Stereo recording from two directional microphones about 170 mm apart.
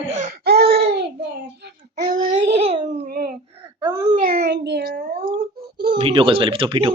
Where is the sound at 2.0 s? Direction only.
50° right (ahead or behind).